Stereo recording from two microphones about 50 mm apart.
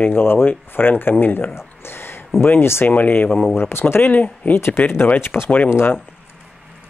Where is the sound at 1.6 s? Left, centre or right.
Left.